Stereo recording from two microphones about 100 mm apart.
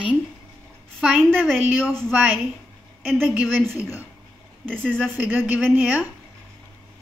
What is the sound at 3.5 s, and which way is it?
A woman's voice, 20° right (ahead or behind).